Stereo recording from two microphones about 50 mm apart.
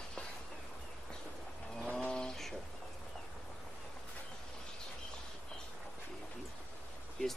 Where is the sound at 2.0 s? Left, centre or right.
Centre.